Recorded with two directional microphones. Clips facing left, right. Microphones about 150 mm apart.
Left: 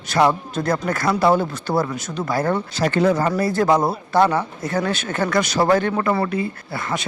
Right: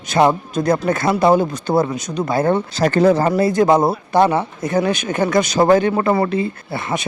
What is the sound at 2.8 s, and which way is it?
Speech, 40° right (ahead or behind).